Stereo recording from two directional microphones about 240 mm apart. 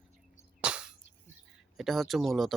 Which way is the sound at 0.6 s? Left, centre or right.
Centre.